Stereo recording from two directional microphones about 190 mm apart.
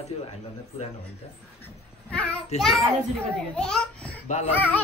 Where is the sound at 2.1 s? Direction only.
5° left (ahead or behind).